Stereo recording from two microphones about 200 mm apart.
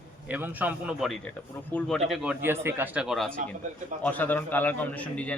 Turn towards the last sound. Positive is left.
turn(degrees=5)  # may be behind; listen again after turning